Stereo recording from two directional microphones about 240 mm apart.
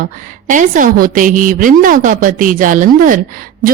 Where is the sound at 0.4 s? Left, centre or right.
Right.